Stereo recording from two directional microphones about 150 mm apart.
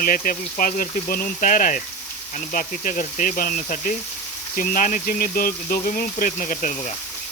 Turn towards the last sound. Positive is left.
turn(degrees=55)  # may be behind; listen again after turning